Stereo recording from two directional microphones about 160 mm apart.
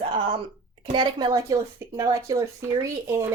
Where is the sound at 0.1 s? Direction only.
35° right (ahead or behind).